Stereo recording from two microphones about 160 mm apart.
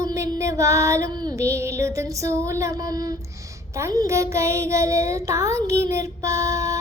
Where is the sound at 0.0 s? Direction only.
20° right (ahead or behind).